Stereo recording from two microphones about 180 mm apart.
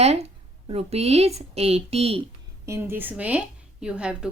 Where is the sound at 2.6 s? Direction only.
15° right (ahead or behind).